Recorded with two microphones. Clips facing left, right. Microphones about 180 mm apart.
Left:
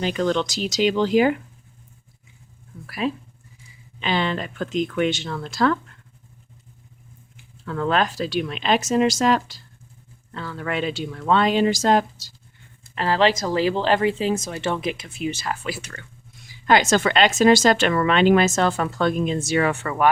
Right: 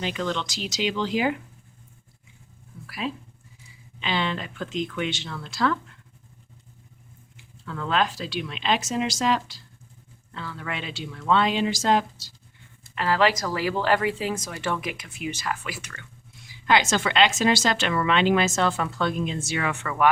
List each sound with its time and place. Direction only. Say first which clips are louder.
0.0 s a woman's voice: left 6 dB; 45° left (ahead or behind)
2.8 s a woman's voice: left 6 dB; 50° left (ahead or behind)
7.6 s a woman's voice: left 4 dB; 50° left (ahead or behind)
13.0 s a woman's voice: left 3 dB; 30° left (ahead or behind)
16.6 s a woman's voice: left 4 dB; 45° left (ahead or behind)